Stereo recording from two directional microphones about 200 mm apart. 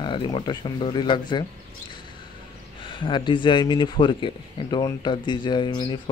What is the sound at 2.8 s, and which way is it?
Speech, 25° left (ahead or behind).